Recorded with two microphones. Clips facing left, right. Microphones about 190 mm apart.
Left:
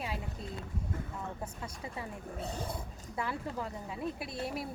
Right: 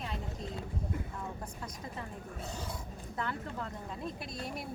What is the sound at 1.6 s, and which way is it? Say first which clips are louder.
Speech: right 1 dB; 10° left (ahead or behind).